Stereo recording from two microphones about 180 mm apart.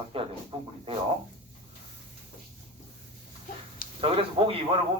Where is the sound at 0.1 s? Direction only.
30° right (ahead or behind).